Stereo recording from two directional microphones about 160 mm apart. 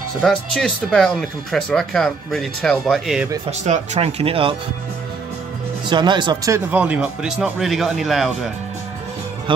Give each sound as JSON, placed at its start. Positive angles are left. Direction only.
{"t": 0.2, "sound": "speech", "side_deg": 5}
{"t": 3.6, "sound": "speech", "side_deg": -45}
{"t": 5.9, "sound": "speech", "side_deg": -30}
{"t": 6.5, "sound": "speech", "side_deg": -10}